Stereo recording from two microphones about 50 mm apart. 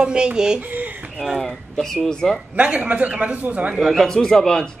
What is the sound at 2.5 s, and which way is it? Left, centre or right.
Speech, right.